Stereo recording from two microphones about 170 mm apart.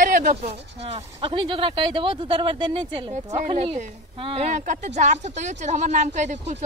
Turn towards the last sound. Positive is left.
turn(degrees=-45)  # may be behind; listen again after turning